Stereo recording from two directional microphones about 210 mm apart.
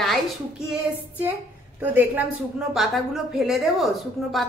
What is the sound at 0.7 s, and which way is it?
Child singing, 10° right (ahead or behind).